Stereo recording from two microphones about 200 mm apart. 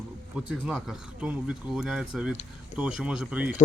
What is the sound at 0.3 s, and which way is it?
Speech, 5° right (ahead or behind).